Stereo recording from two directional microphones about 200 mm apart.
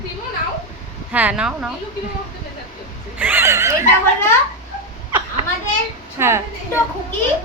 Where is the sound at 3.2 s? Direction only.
10° right (ahead or behind).